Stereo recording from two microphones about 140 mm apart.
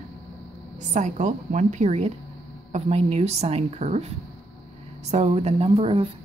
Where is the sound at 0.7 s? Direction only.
60° right (ahead or behind).